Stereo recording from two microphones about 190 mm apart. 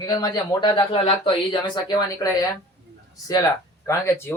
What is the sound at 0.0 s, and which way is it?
Speech, 20° left (ahead or behind).